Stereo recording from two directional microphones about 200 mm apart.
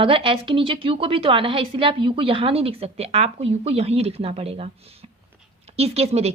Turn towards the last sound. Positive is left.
turn(degrees=-30)  # may be behind; listen again after turning